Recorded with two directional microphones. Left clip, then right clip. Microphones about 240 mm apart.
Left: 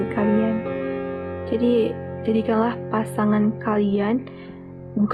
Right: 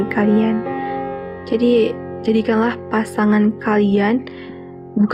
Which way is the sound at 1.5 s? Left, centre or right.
Right.